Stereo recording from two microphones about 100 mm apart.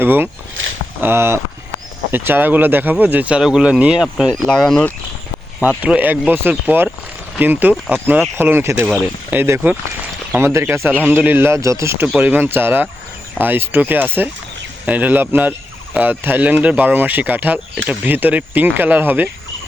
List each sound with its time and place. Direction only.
0.0 s a man's voice: 20° right (ahead or behind)
4.5 s speech: 5° left (ahead or behind)
5.6 s a man's voice: 15° right (ahead or behind); by 12.0 s 30° right (ahead or behind)
12.0 s a man's voice: 15° right (ahead or behind)